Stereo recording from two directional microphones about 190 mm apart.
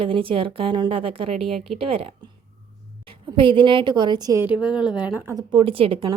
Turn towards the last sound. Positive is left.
turn(degrees=-25)  # may be behind; listen again after turning